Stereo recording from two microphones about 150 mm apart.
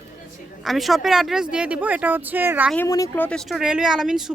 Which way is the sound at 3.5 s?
5° right (ahead or behind).